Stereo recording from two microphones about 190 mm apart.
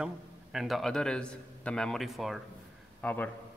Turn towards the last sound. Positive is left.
turn(degrees=10)  # may be behind; listen again after turning